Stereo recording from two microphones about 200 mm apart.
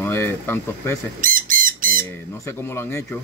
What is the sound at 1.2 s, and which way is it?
Chicken, 45° right (ahead or behind).